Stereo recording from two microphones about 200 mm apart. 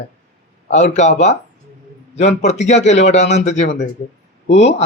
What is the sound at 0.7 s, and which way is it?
A man's voice, 35° left (ahead or behind).